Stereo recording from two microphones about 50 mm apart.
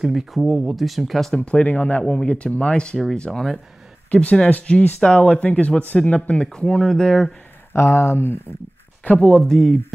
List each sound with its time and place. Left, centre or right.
0.0 s speech: centre
1.3 s speech: left
3.3 s speech: centre
4.1 s speech: left
6.5 s speech: centre
7.7 s speech: left
9.0 s speech: left
9.4 s speech: centre